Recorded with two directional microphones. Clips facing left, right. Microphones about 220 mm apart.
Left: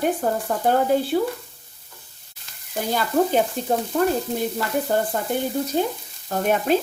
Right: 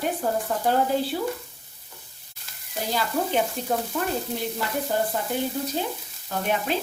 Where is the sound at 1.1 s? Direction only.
55° left (ahead or behind).